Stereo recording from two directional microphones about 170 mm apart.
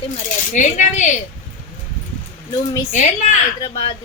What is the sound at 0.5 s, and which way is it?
Speech, 45° left (ahead or behind).